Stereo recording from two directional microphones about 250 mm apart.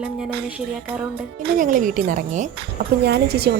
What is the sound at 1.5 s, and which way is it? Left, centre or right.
A woman's voice, right.